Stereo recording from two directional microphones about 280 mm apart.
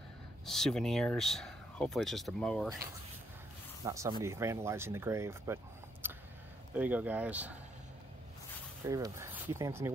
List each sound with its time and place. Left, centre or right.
0.5 s speech: centre
3.8 s speech: centre
6.0 s a sound: centre
6.7 s speech: centre
8.8 s speech: centre